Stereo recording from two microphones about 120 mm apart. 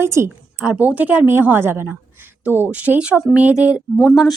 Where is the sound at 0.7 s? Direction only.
10° right (ahead or behind).